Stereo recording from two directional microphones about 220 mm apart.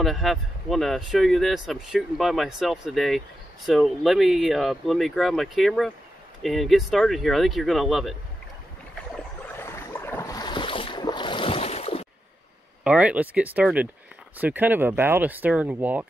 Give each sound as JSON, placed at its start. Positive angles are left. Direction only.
{"t": 0.0, "sound": "speech", "side_deg": 0}
{"t": 9.6, "sound": "boat", "side_deg": 10}
{"t": 12.8, "sound": "speech", "side_deg": -5}